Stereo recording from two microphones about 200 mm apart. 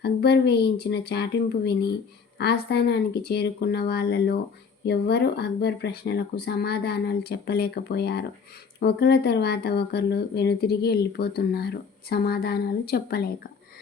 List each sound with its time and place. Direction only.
0.0 s speech: 55° left (ahead or behind)